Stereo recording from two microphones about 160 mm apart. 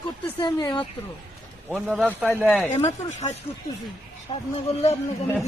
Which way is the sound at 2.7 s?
45° left (ahead or behind).